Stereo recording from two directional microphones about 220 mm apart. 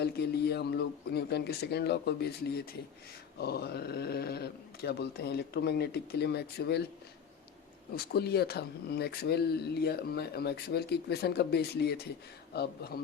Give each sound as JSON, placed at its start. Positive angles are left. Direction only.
{"t": 0.0, "sound": "speech", "side_deg": 50}
{"t": 3.3, "sound": "speech", "side_deg": 45}
{"t": 7.9, "sound": "speech", "side_deg": 45}